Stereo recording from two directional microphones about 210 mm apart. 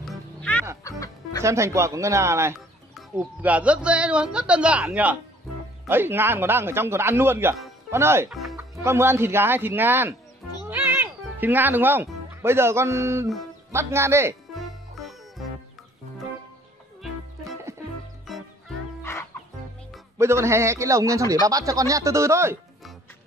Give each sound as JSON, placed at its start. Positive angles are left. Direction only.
{"t": 0.0, "sound": "music", "side_deg": 5}
{"t": 0.8, "sound": "music", "side_deg": 15}
{"t": 1.4, "sound": "a man's voice", "side_deg": -15}
{"t": 8.3, "sound": "speech", "side_deg": 0}
{"t": 8.7, "sound": "a man's voice", "side_deg": -10}
{"t": 14.5, "sound": "music", "side_deg": 0}
{"t": 18.2, "sound": "music", "side_deg": 0}
{"t": 20.2, "sound": "a man's voice", "side_deg": -10}